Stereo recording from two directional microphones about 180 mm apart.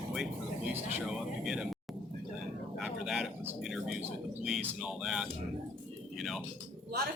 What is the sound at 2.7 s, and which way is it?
Speech, centre (ahead or behind).